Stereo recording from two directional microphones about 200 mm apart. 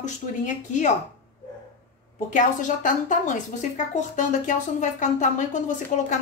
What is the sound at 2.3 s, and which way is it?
Speech, 40° left (ahead or behind).